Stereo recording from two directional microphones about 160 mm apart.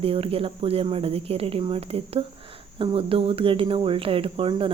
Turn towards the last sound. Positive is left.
turn(degrees=-35)  # may be behind; listen again after turning